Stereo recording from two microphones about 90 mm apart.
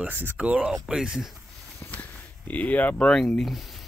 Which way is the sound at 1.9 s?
15° left (ahead or behind).